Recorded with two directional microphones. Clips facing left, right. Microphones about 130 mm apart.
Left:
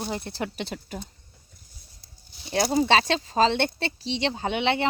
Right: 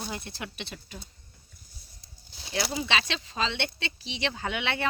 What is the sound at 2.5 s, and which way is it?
Speech, 45° left (ahead or behind).